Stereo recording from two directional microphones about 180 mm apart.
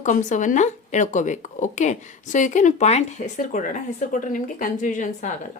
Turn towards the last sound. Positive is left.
turn(degrees=45)  # may be behind; listen again after turning